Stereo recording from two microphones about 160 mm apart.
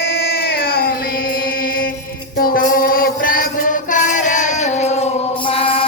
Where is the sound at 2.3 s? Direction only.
65° left (ahead or behind); by 5.1 s 45° left (ahead or behind).